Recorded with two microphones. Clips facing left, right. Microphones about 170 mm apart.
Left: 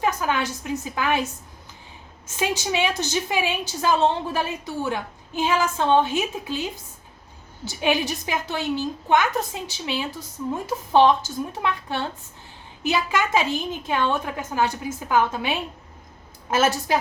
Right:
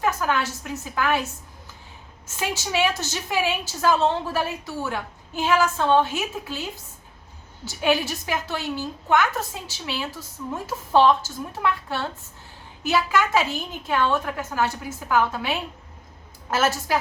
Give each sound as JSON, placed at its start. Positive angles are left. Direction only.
{"t": 0.0, "sound": "a woman's voice", "side_deg": 20}
{"t": 2.3, "sound": "a woman's voice", "side_deg": 15}